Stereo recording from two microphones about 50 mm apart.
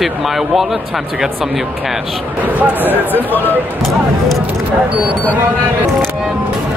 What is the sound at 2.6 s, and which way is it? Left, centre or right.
Speech, right.